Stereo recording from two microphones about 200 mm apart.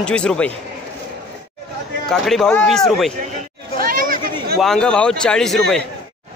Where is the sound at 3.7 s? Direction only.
45° right (ahead or behind).